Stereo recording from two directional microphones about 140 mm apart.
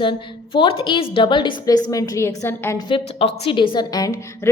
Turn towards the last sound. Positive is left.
turn(degrees=20)  # may be behind; listen again after turning